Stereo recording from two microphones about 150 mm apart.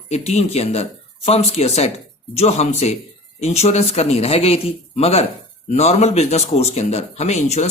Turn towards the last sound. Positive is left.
turn(degrees=45)  # may be behind; listen again after turning